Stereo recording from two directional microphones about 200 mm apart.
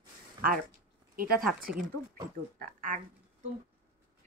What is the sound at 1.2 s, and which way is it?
Speech, 45° right (ahead or behind).